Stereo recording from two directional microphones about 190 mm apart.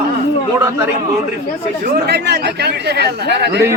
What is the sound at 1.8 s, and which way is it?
Speech, 60° right (ahead or behind).